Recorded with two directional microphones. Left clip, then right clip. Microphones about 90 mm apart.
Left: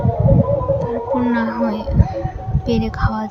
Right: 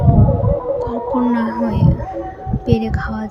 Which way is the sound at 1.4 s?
15° right (ahead or behind).